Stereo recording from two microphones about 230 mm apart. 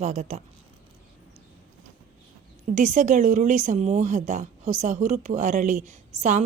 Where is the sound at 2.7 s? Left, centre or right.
Right.